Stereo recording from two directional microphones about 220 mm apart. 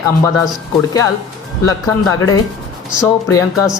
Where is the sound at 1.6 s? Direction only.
15° left (ahead or behind).